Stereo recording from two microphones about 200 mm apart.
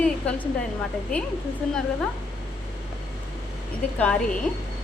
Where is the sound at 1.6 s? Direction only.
5° left (ahead or behind).